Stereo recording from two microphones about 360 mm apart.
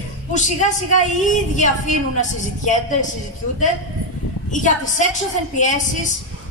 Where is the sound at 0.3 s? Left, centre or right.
Centre.